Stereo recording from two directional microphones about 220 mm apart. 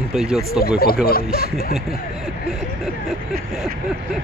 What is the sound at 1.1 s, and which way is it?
Speech, 45° left (ahead or behind).